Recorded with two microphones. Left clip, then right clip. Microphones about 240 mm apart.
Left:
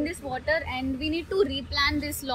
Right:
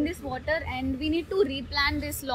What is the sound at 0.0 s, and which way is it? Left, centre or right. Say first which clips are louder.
Speech: left 1 dB; right.